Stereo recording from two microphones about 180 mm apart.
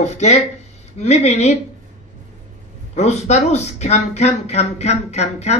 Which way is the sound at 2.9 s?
40° left (ahead or behind).